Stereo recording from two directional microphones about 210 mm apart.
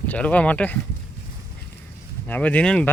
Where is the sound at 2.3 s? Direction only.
5° left (ahead or behind).